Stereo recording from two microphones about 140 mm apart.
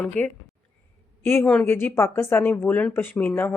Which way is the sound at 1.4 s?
10° left (ahead or behind).